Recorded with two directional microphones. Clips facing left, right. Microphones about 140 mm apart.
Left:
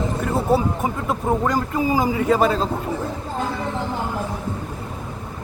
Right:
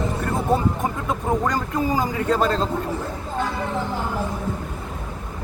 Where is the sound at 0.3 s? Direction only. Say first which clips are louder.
Left 2 dB; 5° left (ahead or behind).